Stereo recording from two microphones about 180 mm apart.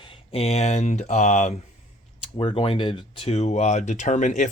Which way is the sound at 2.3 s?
30° left (ahead or behind).